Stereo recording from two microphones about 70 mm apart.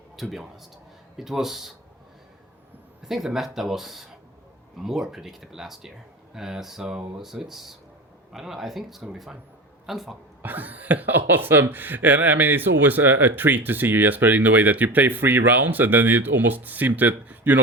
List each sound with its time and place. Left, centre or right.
0.2 s speech: centre
3.0 s speech: centre
10.4 s speech: right